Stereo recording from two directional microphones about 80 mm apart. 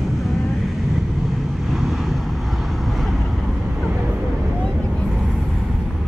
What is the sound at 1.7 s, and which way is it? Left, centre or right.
Vehicle, centre.